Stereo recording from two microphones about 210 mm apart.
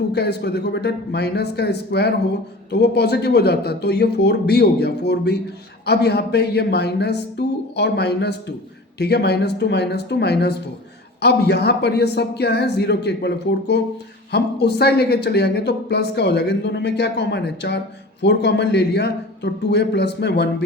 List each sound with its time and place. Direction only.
0.1 s speech: 50° left (ahead or behind)